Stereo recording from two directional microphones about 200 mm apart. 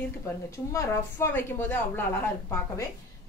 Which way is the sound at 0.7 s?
15° left (ahead or behind).